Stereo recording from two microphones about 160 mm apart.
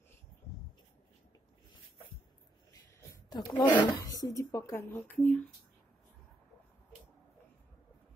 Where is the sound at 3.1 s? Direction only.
25° left (ahead or behind).